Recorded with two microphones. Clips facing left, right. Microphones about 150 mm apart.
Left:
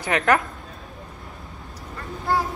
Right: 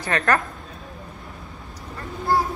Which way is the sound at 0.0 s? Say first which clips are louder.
Left 2 dB; 15° left (ahead or behind).